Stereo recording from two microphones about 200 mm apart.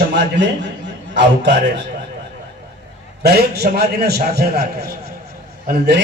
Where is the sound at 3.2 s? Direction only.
55° right (ahead or behind).